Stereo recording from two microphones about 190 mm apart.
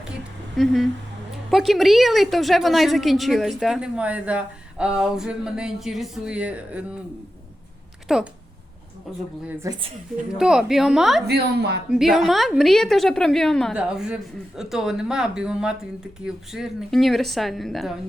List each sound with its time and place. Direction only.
0.5 s speech: centre (ahead or behind)
8.0 s speech: centre (ahead or behind)
9.5 s a woman's voice: 15° right (ahead or behind)
10.3 s speech: 5° right (ahead or behind)
11.3 s a woman's voice: 60° right (ahead or behind)
11.9 s speech: centre (ahead or behind)